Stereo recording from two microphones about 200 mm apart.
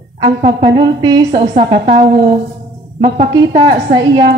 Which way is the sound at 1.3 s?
40° right (ahead or behind).